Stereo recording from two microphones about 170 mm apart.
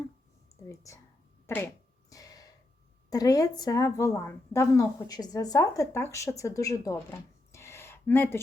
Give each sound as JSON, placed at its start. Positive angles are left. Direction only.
{"t": 0.7, "sound": "speech", "side_deg": 20}
{"t": 1.5, "sound": "a sound", "side_deg": 15}
{"t": 3.1, "sound": "a woman's voice", "side_deg": 20}